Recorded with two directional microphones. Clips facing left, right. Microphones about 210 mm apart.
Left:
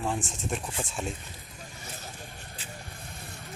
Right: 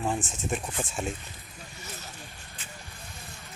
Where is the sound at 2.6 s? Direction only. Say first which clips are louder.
Left 2 dB; 35° left (ahead or behind).